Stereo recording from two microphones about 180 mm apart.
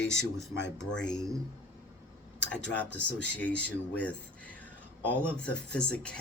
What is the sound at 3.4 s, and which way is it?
Speech, 10° left (ahead or behind).